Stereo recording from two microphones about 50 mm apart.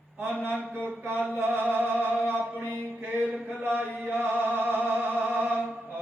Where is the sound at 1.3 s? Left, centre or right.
Right.